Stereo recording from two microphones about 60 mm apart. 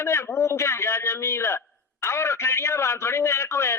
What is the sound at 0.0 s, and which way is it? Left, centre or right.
A man's voice, left.